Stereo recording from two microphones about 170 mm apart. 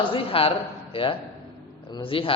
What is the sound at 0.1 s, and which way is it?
A man's voice, 35° left (ahead or behind).